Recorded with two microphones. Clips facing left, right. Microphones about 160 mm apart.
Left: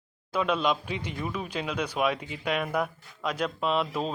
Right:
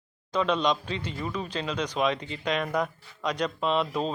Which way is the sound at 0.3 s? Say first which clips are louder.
Right 1 dB; 5° left (ahead or behind).